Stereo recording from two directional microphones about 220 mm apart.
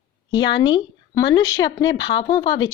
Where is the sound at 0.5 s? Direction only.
20° left (ahead or behind).